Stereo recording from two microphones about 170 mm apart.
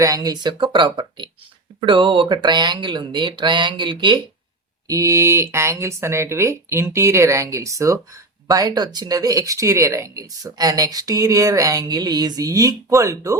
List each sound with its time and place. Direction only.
0.0 s speech: 20° right (ahead or behind)